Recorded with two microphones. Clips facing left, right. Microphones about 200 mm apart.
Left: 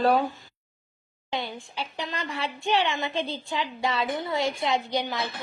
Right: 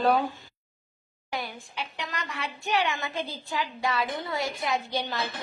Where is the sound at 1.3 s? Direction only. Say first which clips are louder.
Left 3 dB; 25° left (ahead or behind).